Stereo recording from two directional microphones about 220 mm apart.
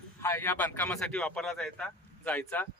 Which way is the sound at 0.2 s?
10° left (ahead or behind).